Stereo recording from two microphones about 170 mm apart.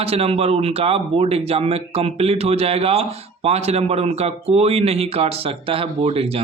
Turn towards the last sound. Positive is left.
turn(degrees=-35)  # may be behind; listen again after turning